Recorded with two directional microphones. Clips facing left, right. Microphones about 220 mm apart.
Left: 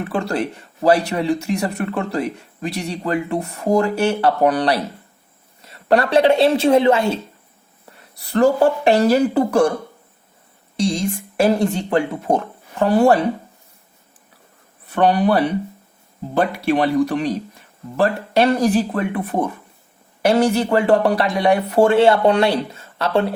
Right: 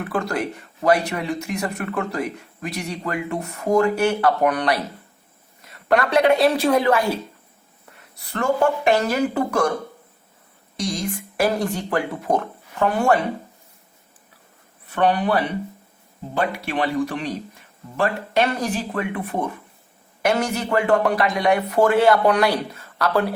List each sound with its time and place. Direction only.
0.1 s speech: 30° left (ahead or behind)
5.9 s speech: 30° left (ahead or behind)
8.3 s speech: 35° left (ahead or behind)
10.8 s speech: 30° left (ahead or behind)
14.9 s speech: 35° left (ahead or behind)
16.6 s speech: 40° left (ahead or behind)